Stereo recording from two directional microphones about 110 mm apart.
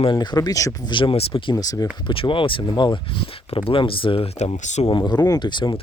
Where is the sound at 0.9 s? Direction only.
50° left (ahead or behind).